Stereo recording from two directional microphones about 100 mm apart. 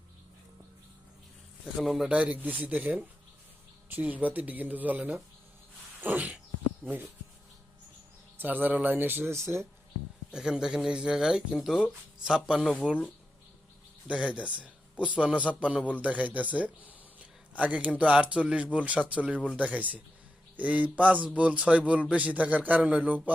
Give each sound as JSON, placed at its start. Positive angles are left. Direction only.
{"t": 1.7, "sound": "a man's voice", "side_deg": -5}
{"t": 2.1, "sound": "speech", "side_deg": -15}
{"t": 6.0, "sound": "a sound", "side_deg": -15}
{"t": 6.8, "sound": "speech", "side_deg": -20}
{"t": 8.4, "sound": "speech", "side_deg": -20}
{"t": 10.3, "sound": "speech", "side_deg": -5}
{"t": 14.1, "sound": "speech", "side_deg": -15}